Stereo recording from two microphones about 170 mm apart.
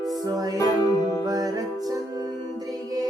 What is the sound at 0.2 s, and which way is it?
Music, 20° right (ahead or behind).